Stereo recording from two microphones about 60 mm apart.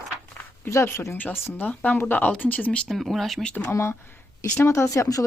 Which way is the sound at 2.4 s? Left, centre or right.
Left.